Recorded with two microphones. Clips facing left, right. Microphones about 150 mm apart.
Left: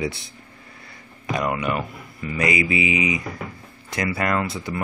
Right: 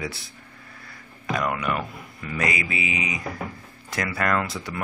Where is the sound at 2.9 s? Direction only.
5° left (ahead or behind).